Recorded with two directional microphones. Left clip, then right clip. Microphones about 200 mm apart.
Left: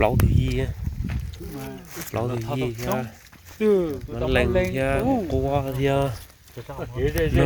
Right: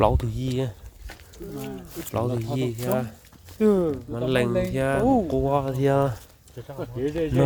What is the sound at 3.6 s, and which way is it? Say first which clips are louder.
Speech: left 1 dB; 45° right (ahead or behind).